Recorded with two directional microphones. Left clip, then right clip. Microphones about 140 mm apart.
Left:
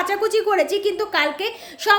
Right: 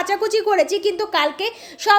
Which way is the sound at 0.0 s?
30° right (ahead or behind).